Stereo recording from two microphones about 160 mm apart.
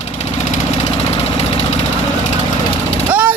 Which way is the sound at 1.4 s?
40° left (ahead or behind).